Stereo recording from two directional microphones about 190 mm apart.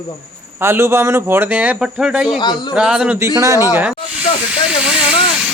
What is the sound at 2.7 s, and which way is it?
Speech, 5° right (ahead or behind).